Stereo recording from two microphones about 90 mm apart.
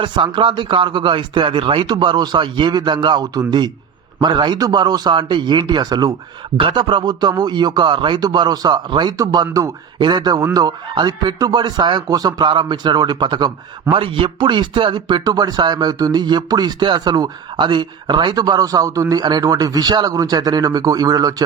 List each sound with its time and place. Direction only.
0.0 s speech: 65° right (ahead or behind); by 6.1 s 45° right (ahead or behind)
6.6 s speech: 65° right (ahead or behind); by 9.7 s 40° right (ahead or behind)
10.0 s speech: 55° right (ahead or behind)
12.5 s speech: 60° right (ahead or behind)
13.9 s speech: 75° right (ahead or behind); by 21.4 s 45° right (ahead or behind)